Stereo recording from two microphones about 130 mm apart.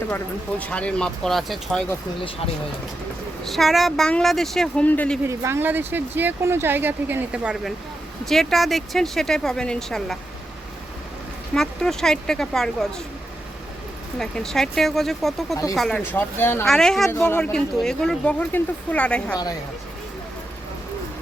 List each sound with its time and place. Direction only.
0.6 s speech: 10° left (ahead or behind)
3.4 s speech: centre (ahead or behind)
5.3 s speech: 20° right (ahead or behind); by 10.2 s 5° left (ahead or behind)
11.5 s speech: 5° left (ahead or behind)
14.2 s speech: 5° left (ahead or behind)
16.1 s speech: 15° left (ahead or behind)
16.6 s speech: 5° left (ahead or behind)
17.1 s speech: 15° left (ahead or behind)
19.3 s a woman's voice: 30° left (ahead or behind)